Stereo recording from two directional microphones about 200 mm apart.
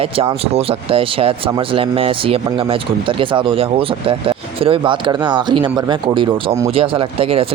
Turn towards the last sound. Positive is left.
turn(degrees=-30)  # may be behind; listen again after turning